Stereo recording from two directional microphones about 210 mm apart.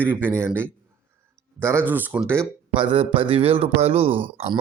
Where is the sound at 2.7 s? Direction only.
25° right (ahead or behind).